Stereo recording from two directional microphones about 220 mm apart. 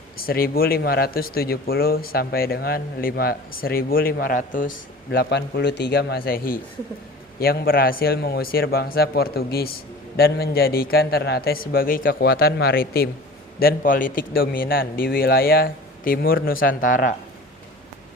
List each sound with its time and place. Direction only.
0.2 s speech: 40° left (ahead or behind)
5.1 s a man's voice: 50° left (ahead or behind)